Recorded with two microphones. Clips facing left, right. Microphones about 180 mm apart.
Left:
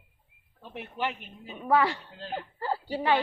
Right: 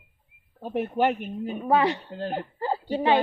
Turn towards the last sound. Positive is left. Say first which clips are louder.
# right 4 dB
turn(degrees=-20)  # may be behind; listen again after turning